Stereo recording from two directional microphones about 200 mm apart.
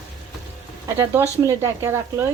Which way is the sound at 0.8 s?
15° right (ahead or behind).